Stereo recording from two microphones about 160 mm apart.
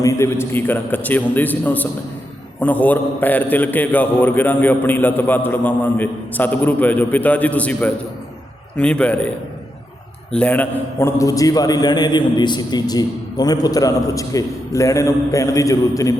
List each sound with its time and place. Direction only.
0.0 s a man's voice: 20° left (ahead or behind)
10.3 s a man's voice: 10° left (ahead or behind)